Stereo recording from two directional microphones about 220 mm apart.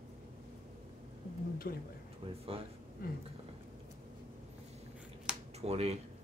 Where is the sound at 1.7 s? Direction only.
40° left (ahead or behind).